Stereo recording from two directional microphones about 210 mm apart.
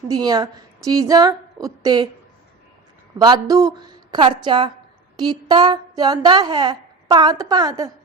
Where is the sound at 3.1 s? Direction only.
20° right (ahead or behind).